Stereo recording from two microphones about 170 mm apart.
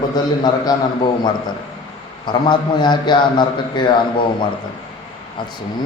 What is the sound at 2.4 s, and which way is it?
A man's voice, 25° left (ahead or behind).